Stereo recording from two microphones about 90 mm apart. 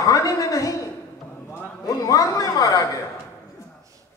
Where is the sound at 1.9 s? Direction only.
40° left (ahead or behind).